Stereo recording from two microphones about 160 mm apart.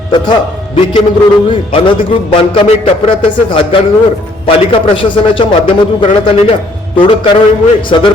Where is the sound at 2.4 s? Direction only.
35° left (ahead or behind).